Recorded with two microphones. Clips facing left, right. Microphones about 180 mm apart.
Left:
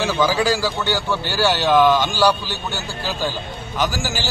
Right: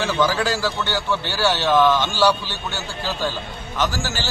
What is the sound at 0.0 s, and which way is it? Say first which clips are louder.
A man's voice: left 2 dB; 5° left (ahead or behind).